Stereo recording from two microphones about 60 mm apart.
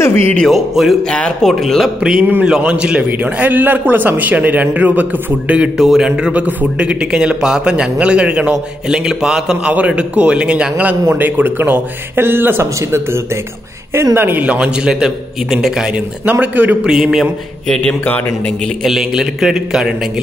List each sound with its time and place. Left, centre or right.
0.0 s speech: left
0.5 s music: centre
1.0 s speech: centre
1.4 s music: centre
2.0 s a man's voice: centre; by 5.6 s right
5.6 s speech: centre
9.7 s a man's voice: right
14.1 s speech: right
14.4 s speech: centre
16.3 s a man's voice: right
16.8 s speech: centre
17.8 s a man's voice: left
18.9 s speech: centre